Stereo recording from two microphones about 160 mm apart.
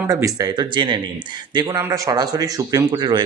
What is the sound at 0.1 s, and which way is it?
A man's voice, 20° right (ahead or behind).